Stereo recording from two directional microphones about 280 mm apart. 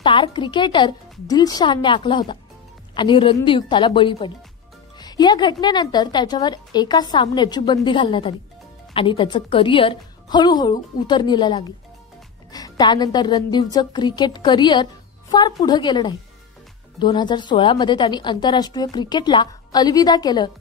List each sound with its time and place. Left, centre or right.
0.0 s a woman's voice: centre